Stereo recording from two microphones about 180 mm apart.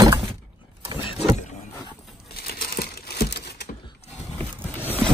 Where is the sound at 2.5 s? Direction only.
60° left (ahead or behind).